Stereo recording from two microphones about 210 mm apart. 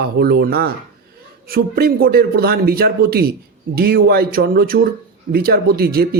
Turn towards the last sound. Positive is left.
turn(degrees=-45)  # may be behind; listen again after turning